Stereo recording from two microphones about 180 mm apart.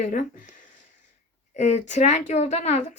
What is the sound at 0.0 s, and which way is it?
Speech, 50° left (ahead or behind).